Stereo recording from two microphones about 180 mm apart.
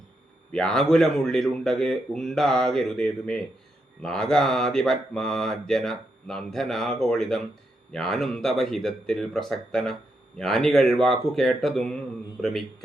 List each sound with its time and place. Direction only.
0.5 s speech: centre (ahead or behind)